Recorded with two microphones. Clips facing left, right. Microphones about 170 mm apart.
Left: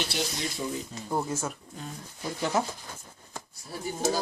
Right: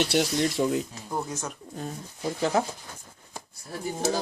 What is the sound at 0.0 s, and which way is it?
Speech, 65° right (ahead or behind).